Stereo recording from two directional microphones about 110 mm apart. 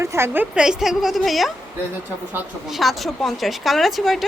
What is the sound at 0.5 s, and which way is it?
A woman's voice, 5° right (ahead or behind).